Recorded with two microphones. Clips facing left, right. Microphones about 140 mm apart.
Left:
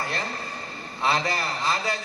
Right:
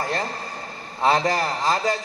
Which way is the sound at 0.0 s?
40° right (ahead or behind).